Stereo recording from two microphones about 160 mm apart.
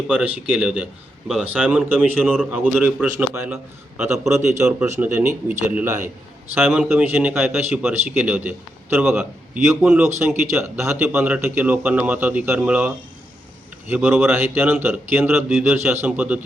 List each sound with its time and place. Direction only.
0.1 s a man's voice: 10° right (ahead or behind)
10.6 s a man's voice: 15° right (ahead or behind)
15.4 s a man's voice: centre (ahead or behind)
15.7 s a man's voice: 15° right (ahead or behind)